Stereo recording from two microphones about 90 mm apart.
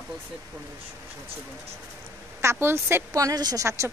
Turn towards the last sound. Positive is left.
turn(degrees=-45)  # may be behind; listen again after turning